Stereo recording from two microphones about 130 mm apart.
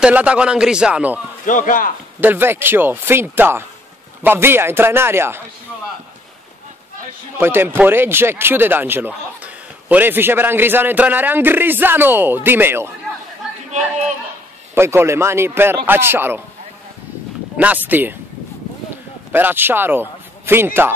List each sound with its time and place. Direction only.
0.0 s speech: 10° right (ahead or behind)
1.4 s a man's voice: 85° left
2.1 s speech: 15° right (ahead or behind)
7.3 s speech: 15° right (ahead or behind)
13.7 s chatter: 65° right (ahead or behind)
14.7 s a man's voice: 20° right (ahead or behind)
17.6 s speech: 10° right (ahead or behind)
19.3 s speech: 15° right (ahead or behind)